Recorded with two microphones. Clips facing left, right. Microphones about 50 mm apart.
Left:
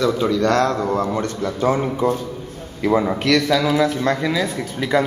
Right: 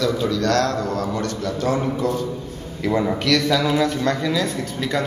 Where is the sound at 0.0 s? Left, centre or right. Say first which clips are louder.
Left 3 dB; left.